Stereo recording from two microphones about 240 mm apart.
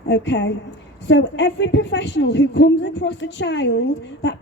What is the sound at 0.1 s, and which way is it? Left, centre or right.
A woman's voice, left.